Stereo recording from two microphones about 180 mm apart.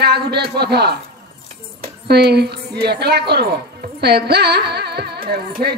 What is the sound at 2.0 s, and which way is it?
A woman's voice, 65° right (ahead or behind).